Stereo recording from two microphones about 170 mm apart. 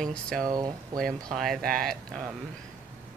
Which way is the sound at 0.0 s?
5° left (ahead or behind).